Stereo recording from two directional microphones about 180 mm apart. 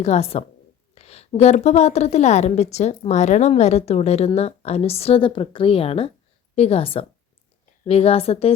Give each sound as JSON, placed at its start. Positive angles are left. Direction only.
{"t": 0.0, "sound": "a woman's voice", "side_deg": 35}